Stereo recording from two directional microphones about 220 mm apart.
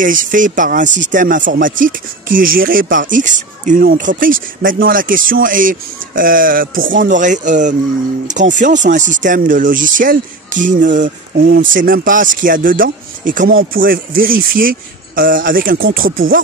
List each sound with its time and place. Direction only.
0.0 s speech: 40° right (ahead or behind)